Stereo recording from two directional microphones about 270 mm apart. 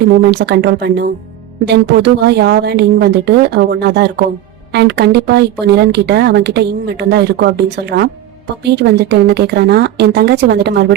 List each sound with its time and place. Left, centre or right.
0.0 s speech: right